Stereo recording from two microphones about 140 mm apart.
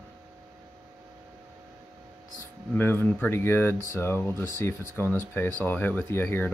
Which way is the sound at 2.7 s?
15° left (ahead or behind).